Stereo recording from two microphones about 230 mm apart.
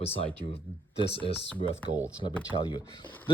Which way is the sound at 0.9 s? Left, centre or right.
Left.